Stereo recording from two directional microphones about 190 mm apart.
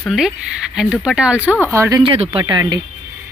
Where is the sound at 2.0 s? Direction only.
30° right (ahead or behind).